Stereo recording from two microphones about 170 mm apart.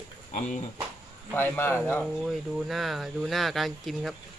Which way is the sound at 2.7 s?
Centre (ahead or behind).